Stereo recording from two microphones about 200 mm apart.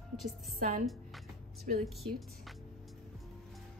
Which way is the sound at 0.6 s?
40° right (ahead or behind).